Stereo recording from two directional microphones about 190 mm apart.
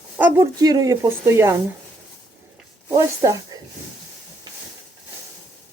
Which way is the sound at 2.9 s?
20° right (ahead or behind).